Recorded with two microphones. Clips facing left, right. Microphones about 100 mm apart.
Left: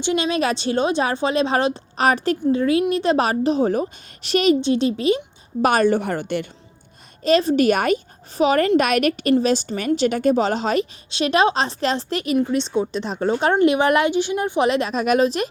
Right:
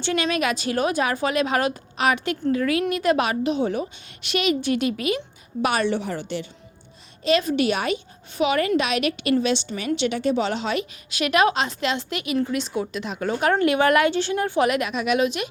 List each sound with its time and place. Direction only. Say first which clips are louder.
0.0 s a woman's voice: left 3 dB; 20° left (ahead or behind)
5.6 s a woman's voice: left 5 dB; 45° left (ahead or behind)
7.3 s a woman's voice: left 4 dB; 40° left (ahead or behind)
12.4 s a woman's voice: left 3 dB; 25° left (ahead or behind)